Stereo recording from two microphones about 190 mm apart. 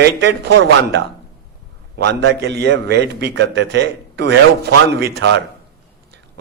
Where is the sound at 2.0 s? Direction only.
70° right (ahead or behind).